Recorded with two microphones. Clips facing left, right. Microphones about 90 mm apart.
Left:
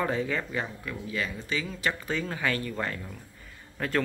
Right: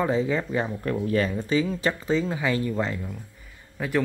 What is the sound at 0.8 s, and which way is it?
Speech, 50° right (ahead or behind).